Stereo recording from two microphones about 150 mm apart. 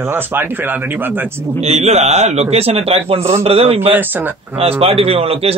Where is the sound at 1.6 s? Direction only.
45° right (ahead or behind).